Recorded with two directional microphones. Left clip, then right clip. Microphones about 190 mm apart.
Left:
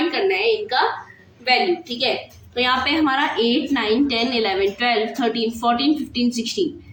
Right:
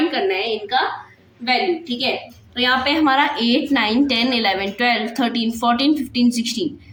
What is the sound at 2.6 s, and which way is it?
A woman's voice, 25° right (ahead or behind).